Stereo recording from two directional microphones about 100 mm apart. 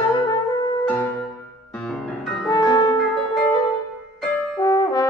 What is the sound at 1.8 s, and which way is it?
Music, 5° left (ahead or behind).